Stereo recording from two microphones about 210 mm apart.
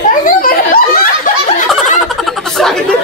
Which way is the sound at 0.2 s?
40° left (ahead or behind).